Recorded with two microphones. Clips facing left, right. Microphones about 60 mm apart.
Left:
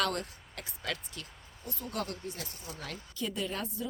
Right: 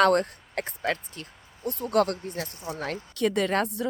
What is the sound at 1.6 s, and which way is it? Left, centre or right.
A woman's voice, right.